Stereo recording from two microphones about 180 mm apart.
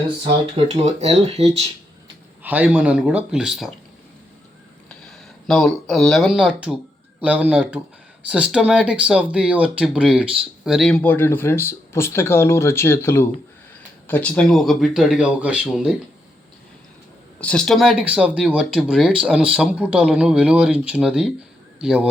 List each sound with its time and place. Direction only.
0.5 s speech: 35° right (ahead or behind)
2.4 s speech: 10° right (ahead or behind)
4.9 s speech: centre (ahead or behind)
17.4 s speech: 5° left (ahead or behind)